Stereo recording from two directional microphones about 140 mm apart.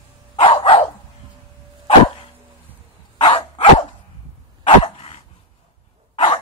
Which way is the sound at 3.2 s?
40° left (ahead or behind).